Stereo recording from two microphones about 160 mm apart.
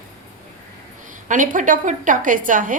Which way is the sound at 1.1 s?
55° right (ahead or behind).